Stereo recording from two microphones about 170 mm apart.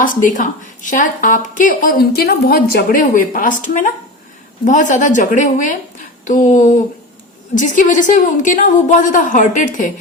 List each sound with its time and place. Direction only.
0.0 s a woman's voice: 50° left (ahead or behind)